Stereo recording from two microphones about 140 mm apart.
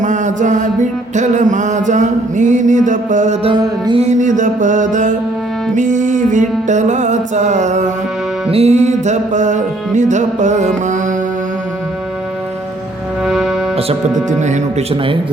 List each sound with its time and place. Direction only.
0.0 s music: 60° right (ahead or behind)
3.4 s music: 35° right (ahead or behind)
4.0 s music: 60° right (ahead or behind)
8.4 s music: 45° right (ahead or behind)
13.2 s music: centre (ahead or behind)
14.3 s music: 60° right (ahead or behind)